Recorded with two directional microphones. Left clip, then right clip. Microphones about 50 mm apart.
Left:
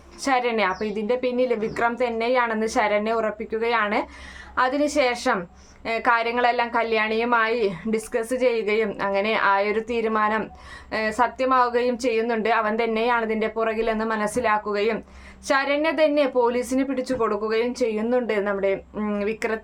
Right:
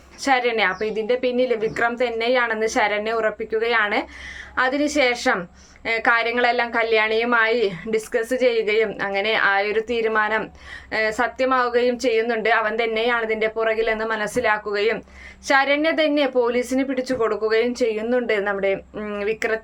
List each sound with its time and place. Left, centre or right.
0.2 s a woman's voice: left